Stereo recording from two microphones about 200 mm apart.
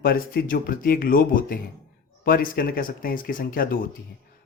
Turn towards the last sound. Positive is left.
turn(degrees=45)  # may be behind; listen again after turning